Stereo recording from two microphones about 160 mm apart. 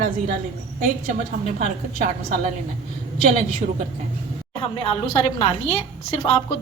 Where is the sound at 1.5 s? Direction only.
50° right (ahead or behind).